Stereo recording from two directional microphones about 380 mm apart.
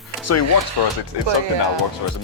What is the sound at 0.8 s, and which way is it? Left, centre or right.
Speech, left.